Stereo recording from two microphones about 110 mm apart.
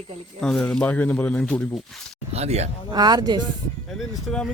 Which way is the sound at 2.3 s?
75° right (ahead or behind).